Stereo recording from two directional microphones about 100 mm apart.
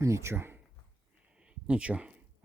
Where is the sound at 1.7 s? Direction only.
10° right (ahead or behind).